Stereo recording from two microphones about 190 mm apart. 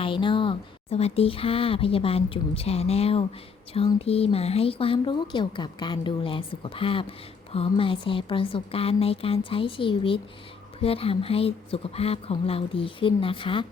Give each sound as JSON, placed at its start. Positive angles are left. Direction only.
{"t": 0.0, "sound": "a woman's voice", "side_deg": 25}